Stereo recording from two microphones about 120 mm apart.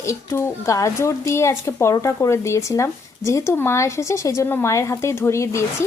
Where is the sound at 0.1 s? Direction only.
25° left (ahead or behind).